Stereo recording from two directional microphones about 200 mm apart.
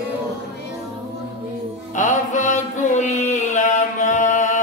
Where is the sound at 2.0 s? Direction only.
40° left (ahead or behind).